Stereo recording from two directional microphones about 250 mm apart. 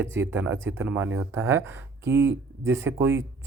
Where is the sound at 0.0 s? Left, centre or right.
Centre.